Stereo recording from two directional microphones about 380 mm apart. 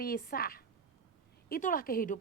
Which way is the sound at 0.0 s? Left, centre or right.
Left.